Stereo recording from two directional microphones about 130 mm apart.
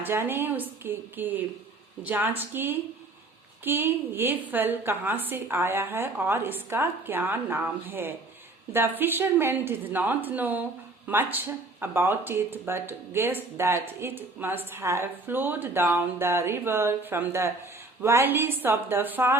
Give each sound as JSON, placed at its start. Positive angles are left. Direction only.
{"t": 0.0, "sound": "speech", "side_deg": -15}